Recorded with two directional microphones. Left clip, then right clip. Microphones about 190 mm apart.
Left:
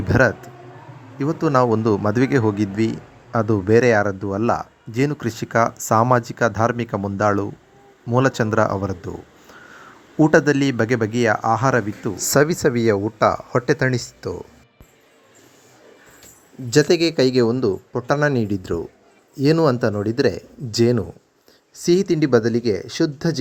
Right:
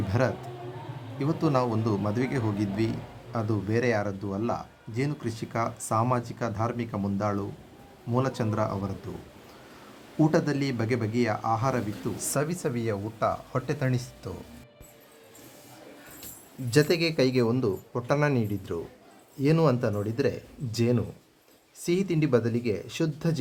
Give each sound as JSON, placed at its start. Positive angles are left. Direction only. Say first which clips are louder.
{"t": 0.1, "sound": "speech", "louder": "left 12 dB", "side_deg": 35}
{"t": 10.2, "sound": "speech", "louder": "left 10 dB", "side_deg": 35}
{"t": 16.6, "sound": "a man's voice", "louder": "left 8 dB", "side_deg": 30}